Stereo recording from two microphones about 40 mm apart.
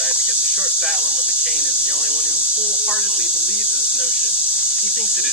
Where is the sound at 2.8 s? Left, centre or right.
Centre.